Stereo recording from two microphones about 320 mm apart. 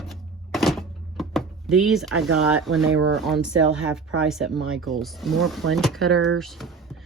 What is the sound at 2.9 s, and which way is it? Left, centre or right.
Speech, right.